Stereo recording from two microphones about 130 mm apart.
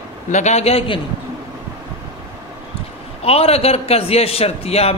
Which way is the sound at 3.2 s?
50° left (ahead or behind).